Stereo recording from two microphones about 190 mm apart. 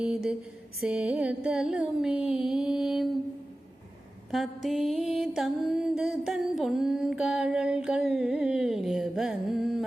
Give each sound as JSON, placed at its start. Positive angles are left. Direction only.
{"t": 0.0, "sound": "music", "side_deg": -5}
{"t": 4.3, "sound": "music", "side_deg": 0}